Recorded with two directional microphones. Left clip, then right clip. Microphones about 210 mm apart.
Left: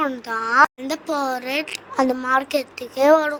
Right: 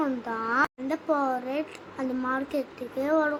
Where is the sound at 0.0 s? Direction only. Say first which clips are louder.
Left 6 dB; 45° left (ahead or behind).